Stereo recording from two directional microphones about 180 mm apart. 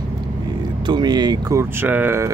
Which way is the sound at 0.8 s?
25° right (ahead or behind).